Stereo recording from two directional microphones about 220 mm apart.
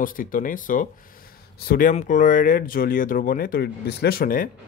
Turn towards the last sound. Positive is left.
turn(degrees=40)  # may be behind; listen again after turning